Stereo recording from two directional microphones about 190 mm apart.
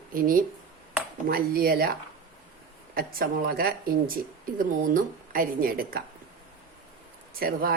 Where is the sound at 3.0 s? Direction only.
50° right (ahead or behind).